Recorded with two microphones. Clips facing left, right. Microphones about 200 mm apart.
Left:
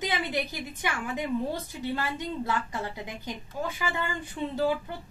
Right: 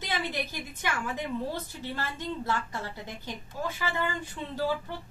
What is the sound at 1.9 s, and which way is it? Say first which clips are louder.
Speech: left 2 dB; 15° left (ahead or behind).